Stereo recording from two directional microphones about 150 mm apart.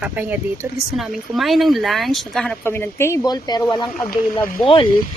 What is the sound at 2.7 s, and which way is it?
Speech, 15° left (ahead or behind).